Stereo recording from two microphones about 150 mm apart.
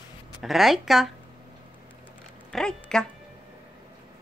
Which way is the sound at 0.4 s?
Centre (ahead or behind).